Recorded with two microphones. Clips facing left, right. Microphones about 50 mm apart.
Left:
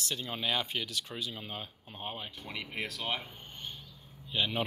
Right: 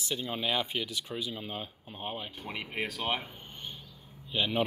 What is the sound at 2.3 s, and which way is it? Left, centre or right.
Speech, right.